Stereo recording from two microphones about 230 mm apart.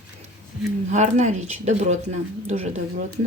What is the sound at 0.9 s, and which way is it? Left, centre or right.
Speech, right.